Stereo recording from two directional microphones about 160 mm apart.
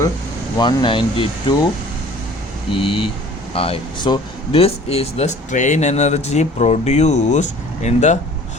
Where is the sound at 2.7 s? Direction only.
35° left (ahead or behind).